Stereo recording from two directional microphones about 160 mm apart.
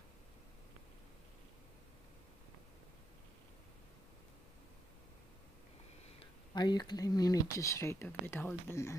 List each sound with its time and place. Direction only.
6.1 s speech: 25° left (ahead or behind)